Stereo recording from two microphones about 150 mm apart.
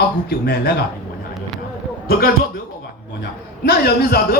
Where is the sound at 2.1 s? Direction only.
80° left.